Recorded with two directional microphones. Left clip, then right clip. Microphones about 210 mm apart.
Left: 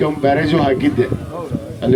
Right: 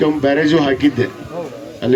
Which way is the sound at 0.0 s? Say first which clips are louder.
Right 1 dB; 45° left (ahead or behind).